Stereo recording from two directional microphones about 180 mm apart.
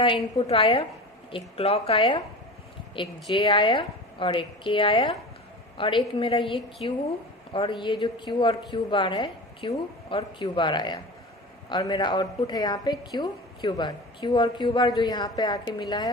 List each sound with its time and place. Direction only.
0.0 s a woman's voice: 30° left (ahead or behind)